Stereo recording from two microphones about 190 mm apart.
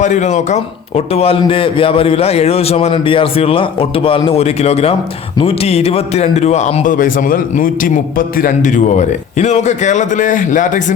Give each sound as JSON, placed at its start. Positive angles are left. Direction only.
{"t": 0.0, "sound": "a man's voice", "side_deg": 40}